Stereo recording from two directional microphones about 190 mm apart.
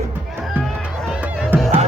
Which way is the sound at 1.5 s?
10° right (ahead or behind).